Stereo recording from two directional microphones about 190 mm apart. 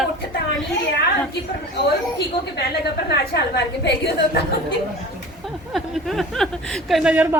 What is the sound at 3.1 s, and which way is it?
A woman's voice, 60° left (ahead or behind).